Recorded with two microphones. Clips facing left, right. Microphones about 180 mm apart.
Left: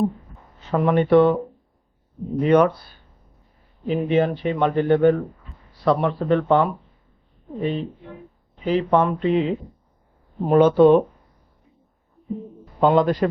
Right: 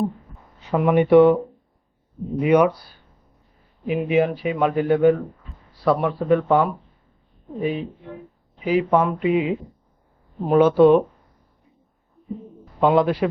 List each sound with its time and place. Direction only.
0.7 s speech: 10° right (ahead or behind)
2.4 s speech: 10° right (ahead or behind)
12.8 s speech: 5° right (ahead or behind)